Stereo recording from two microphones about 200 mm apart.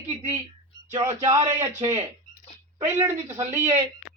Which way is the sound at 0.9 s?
15° right (ahead or behind).